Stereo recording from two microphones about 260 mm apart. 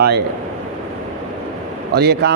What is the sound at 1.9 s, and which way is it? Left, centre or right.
Speech, right.